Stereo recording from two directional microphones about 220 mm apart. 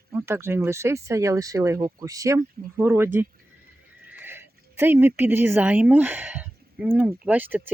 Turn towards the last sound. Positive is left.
turn(degrees=-10)  # may be behind; listen again after turning